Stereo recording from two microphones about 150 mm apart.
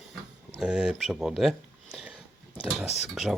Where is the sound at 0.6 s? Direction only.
5° right (ahead or behind).